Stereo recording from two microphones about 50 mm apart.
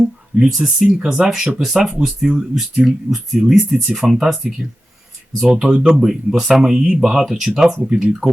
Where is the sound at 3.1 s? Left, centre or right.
Centre.